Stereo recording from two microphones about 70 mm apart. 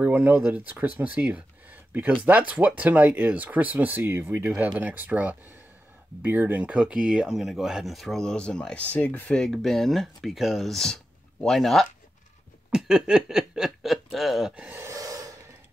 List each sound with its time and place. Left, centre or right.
0.0 s speech: right
4.5 s speech: right; by 9.4 s left
9.4 s speech: centre
12.7 s speech: centre
14.8 s a sound: right